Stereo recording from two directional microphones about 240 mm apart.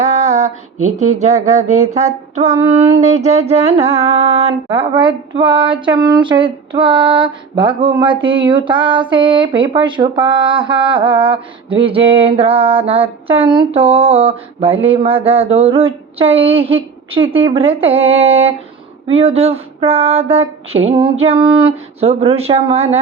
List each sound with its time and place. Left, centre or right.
0.0 s a sound: right
0.9 s child singing: right
17.1 s a woman's voice: right
17.3 s child singing: right